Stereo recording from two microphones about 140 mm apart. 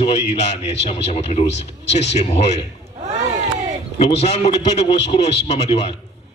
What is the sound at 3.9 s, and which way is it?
A man's voice, 45° left (ahead or behind).